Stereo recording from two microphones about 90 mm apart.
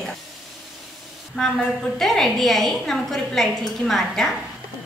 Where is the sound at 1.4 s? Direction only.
5° left (ahead or behind).